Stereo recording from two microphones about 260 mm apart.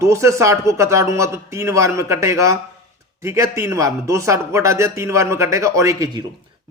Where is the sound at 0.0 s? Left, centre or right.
Centre.